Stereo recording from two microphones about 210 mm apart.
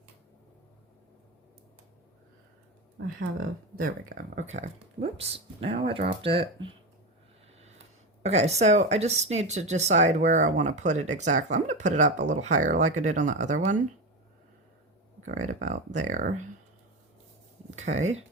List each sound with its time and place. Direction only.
3.2 s speech: 45° right (ahead or behind); by 6.7 s 25° right (ahead or behind)
8.2 s speech: 30° right (ahead or behind)
15.4 s speech: 35° right (ahead or behind)
17.7 s speech: 35° right (ahead or behind)